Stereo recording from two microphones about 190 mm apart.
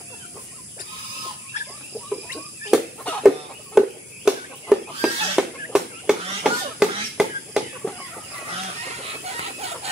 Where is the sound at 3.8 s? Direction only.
5° right (ahead or behind).